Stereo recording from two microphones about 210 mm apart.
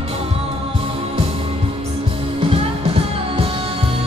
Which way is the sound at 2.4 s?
30° right (ahead or behind).